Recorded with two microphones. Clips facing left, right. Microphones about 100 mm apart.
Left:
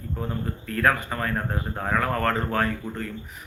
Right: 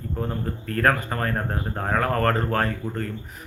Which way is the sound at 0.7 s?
40° right (ahead or behind).